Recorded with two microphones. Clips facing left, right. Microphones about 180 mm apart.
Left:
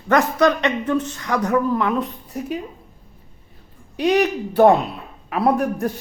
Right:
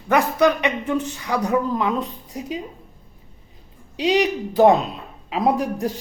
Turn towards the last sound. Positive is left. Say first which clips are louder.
# left 2 dB
turn(degrees=-15)  # may be behind; listen again after turning